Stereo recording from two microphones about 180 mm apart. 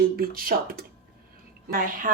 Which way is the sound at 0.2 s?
55° right (ahead or behind).